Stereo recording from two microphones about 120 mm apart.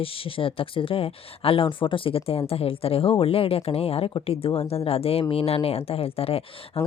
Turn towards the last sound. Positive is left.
turn(degrees=55)  # may be behind; listen again after turning